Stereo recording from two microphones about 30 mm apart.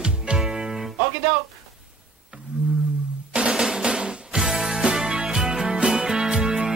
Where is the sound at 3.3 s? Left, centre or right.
Right.